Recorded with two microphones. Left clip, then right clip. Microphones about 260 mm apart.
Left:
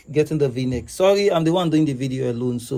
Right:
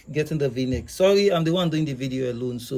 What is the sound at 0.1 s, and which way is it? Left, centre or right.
Speech, centre.